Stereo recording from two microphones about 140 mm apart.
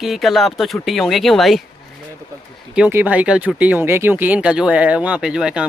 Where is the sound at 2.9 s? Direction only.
10° right (ahead or behind).